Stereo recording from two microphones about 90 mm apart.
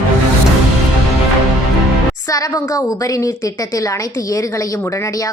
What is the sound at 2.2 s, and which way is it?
A woman's voice, 40° left (ahead or behind).